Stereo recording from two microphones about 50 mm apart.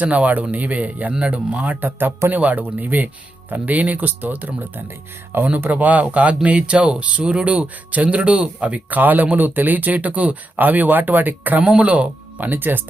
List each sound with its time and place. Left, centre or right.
0.0 s speech: right
2.3 s speech: right
12.4 s speech: right